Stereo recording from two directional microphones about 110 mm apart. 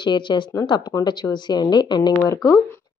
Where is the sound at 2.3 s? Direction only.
25° left (ahead or behind).